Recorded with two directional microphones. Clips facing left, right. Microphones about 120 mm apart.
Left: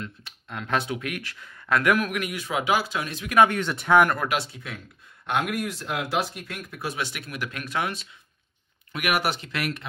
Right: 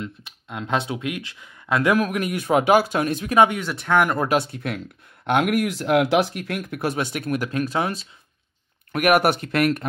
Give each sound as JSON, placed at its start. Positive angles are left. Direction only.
{"t": 0.0, "sound": "speech", "side_deg": -20}
{"t": 2.3, "sound": "speech", "side_deg": -50}
{"t": 3.4, "sound": "speech", "side_deg": -10}
{"t": 3.7, "sound": "speech", "side_deg": 0}
{"t": 4.3, "sound": "speech", "side_deg": -55}
{"t": 5.2, "sound": "speech", "side_deg": -65}
{"t": 8.9, "sound": "speech", "side_deg": -50}